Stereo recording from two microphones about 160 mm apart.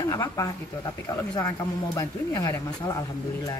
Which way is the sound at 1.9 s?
20° left (ahead or behind).